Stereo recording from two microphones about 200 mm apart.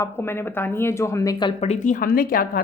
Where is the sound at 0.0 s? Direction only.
10° left (ahead or behind).